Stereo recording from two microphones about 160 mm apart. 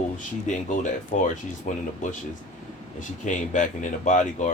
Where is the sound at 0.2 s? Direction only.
50° left (ahead or behind).